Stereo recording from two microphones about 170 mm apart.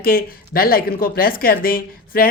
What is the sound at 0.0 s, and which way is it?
Speech, 60° left (ahead or behind).